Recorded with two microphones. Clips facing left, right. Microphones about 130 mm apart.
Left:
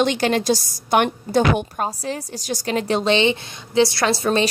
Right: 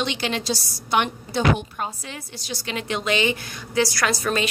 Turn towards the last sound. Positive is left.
turn(degrees=25)  # may be behind; listen again after turning